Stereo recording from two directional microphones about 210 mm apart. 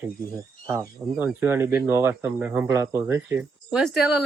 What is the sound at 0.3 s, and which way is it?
Speech, 15° right (ahead or behind).